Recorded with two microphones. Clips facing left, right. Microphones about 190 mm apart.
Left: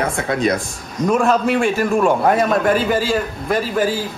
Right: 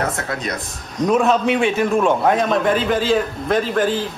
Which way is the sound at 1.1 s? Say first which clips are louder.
Even; centre (ahead or behind).